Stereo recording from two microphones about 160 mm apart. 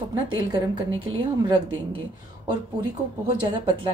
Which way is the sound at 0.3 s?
30° right (ahead or behind).